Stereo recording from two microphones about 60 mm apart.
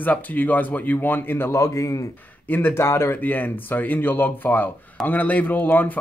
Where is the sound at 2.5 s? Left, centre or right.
Left.